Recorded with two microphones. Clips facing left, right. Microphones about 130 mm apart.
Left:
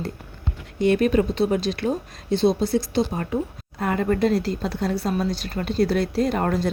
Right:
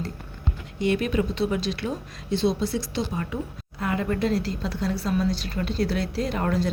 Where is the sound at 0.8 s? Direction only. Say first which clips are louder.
Left 5 dB; 45° left (ahead or behind).